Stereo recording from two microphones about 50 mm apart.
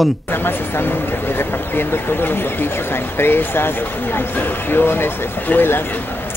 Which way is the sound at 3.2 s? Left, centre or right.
Left.